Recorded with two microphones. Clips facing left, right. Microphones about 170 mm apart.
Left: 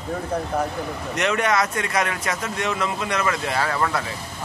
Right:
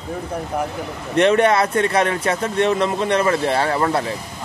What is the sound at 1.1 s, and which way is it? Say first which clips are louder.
Speech: right 7 dB; 30° right (ahead or behind).